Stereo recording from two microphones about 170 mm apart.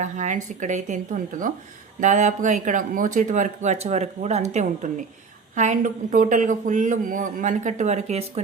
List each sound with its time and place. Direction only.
0.0 s speech: 45° right (ahead or behind)